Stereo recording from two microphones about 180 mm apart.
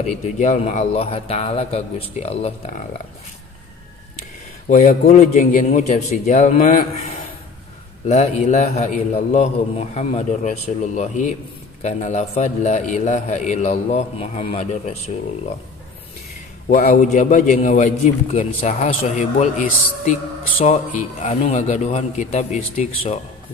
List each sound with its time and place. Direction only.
0.4 s a man's voice: 40° left (ahead or behind)
4.6 s a man's voice: 40° left (ahead or behind)
8.1 s a man's voice: 40° left (ahead or behind)
16.6 s a man's voice: 45° left (ahead or behind)